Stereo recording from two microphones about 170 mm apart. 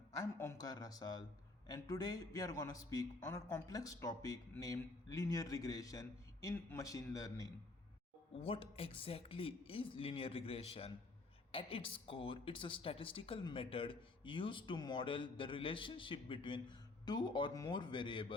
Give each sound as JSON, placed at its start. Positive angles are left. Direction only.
{"t": 0.2, "sound": "speech", "side_deg": 20}
{"t": 8.4, "sound": "speech", "side_deg": 35}